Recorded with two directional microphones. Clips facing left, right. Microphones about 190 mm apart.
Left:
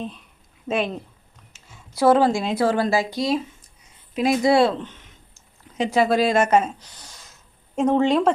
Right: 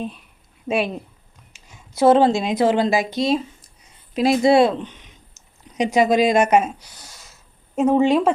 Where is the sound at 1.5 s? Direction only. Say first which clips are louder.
Right 3 dB; 15° right (ahead or behind).